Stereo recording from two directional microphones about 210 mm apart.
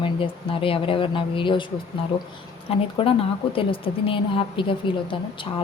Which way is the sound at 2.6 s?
25° left (ahead or behind).